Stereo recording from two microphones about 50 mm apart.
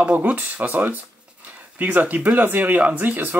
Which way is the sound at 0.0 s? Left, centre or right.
Right.